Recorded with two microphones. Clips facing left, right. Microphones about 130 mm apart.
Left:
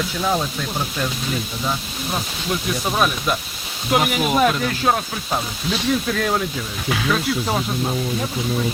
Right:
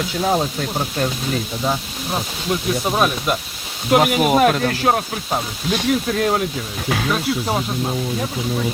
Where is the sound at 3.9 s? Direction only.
45° right (ahead or behind).